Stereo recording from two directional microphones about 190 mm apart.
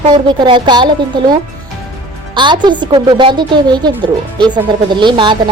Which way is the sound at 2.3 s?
25° right (ahead or behind).